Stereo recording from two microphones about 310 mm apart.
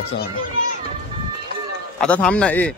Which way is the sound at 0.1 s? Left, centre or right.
Left.